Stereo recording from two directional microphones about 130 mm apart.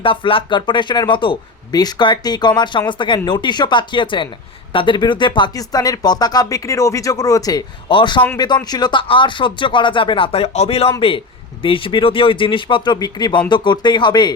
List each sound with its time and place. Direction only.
0.0 s speech: 40° left (ahead or behind)